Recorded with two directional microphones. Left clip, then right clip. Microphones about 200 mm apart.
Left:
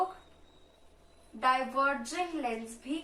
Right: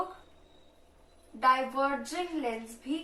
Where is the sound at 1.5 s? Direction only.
15° left (ahead or behind).